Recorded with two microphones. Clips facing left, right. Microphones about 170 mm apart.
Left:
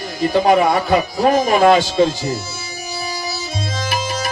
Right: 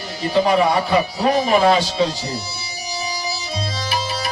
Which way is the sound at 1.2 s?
45° left (ahead or behind).